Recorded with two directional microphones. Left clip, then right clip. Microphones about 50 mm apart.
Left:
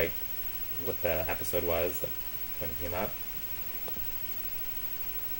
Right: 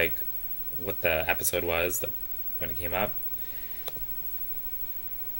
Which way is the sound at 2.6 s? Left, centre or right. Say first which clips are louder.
Right 3 dB; right.